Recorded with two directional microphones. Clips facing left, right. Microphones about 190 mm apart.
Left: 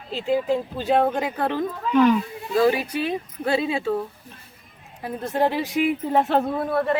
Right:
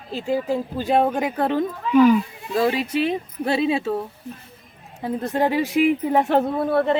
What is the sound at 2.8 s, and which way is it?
Speech, 25° right (ahead or behind).